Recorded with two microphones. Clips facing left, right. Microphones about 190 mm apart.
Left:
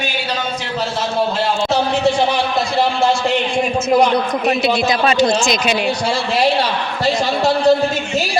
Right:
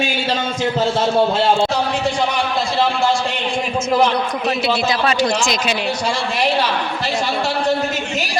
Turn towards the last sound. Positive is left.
turn(degrees=35)  # may be behind; listen again after turning